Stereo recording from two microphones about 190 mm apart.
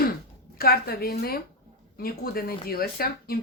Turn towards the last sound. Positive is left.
turn(degrees=55)  # may be behind; listen again after turning